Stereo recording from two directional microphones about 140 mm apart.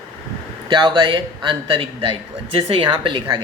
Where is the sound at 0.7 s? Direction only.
30° right (ahead or behind).